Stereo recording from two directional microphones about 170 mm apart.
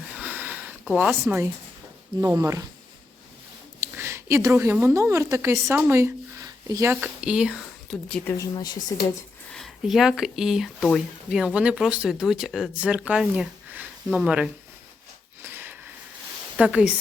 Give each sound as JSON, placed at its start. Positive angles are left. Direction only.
{"t": 0.2, "sound": "a sound", "side_deg": -10}
{"t": 2.2, "sound": "speech", "side_deg": -15}
{"t": 3.8, "sound": "a woman's voice", "side_deg": -15}
{"t": 8.4, "sound": "speech", "side_deg": 25}
{"t": 9.5, "sound": "speech", "side_deg": 0}
{"t": 15.4, "sound": "a sound", "side_deg": -10}
{"t": 16.6, "sound": "speech", "side_deg": -5}